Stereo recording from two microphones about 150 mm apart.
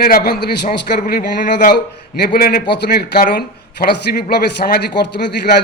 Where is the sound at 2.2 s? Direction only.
90° left.